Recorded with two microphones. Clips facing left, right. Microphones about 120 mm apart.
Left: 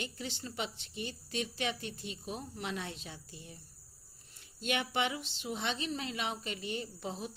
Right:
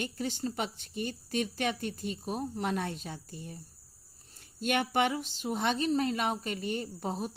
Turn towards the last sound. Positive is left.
turn(degrees=-45)  # may be behind; listen again after turning